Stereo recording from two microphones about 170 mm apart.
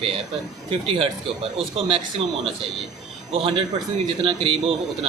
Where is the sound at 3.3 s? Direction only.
35° right (ahead or behind).